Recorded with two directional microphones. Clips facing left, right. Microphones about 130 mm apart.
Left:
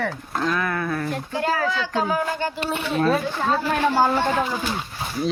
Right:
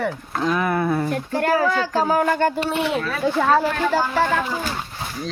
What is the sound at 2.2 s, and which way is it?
Speech, 55° right (ahead or behind).